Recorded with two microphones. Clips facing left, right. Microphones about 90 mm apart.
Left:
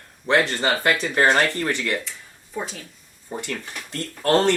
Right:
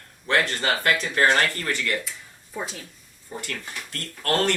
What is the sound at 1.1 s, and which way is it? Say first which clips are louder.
Speech: left 2 dB; 15° left (ahead or behind).